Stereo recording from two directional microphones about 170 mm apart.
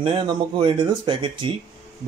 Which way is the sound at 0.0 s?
30° right (ahead or behind).